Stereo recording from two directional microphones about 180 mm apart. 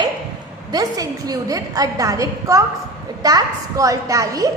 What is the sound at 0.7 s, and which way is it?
A woman's voice, 20° right (ahead or behind).